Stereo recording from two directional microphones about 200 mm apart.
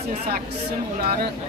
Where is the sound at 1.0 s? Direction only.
45° right (ahead or behind).